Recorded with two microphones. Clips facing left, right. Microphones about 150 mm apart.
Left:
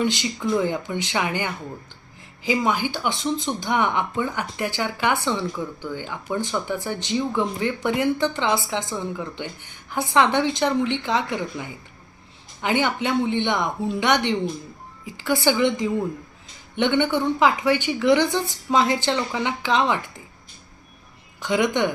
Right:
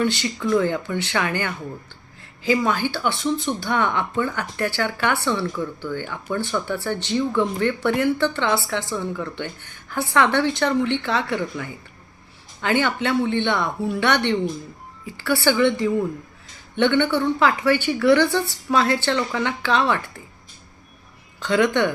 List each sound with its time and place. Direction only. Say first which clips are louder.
0.0 s a woman's voice: right 1 dB; 15° left (ahead or behind)
21.4 s a woman's voice: right 2 dB; 15° left (ahead or behind)